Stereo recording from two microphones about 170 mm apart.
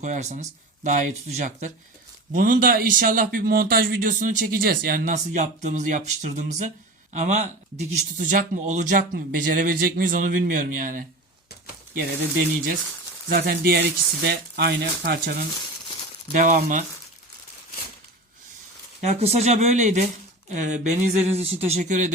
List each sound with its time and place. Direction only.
0.0 s a man's voice: 45° right (ahead or behind)
13.2 s speech: 65° right (ahead or behind)
16.3 s speech: 50° right (ahead or behind)
19.0 s speech: 40° right (ahead or behind)